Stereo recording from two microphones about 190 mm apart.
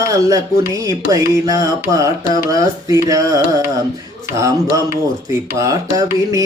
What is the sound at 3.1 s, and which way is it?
Carnatic music, 20° right (ahead or behind).